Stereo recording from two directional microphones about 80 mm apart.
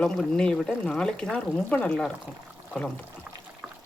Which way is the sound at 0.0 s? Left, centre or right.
Centre.